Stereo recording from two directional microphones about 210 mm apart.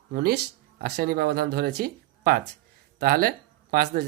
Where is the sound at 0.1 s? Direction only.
45° right (ahead or behind).